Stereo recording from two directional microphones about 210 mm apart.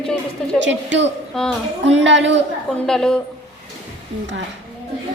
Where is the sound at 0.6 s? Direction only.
60° right (ahead or behind).